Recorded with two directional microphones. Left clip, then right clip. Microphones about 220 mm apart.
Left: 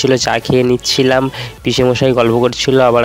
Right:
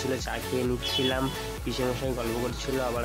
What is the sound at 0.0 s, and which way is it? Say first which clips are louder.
Speech: left 18 dB; 45° left (ahead or behind).